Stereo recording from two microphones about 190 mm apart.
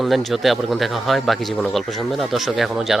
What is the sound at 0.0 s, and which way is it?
Speech, centre (ahead or behind).